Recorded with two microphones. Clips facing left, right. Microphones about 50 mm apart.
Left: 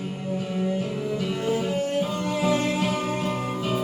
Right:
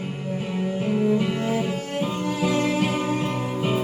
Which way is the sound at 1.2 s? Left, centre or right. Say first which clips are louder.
Right 1 dB; right.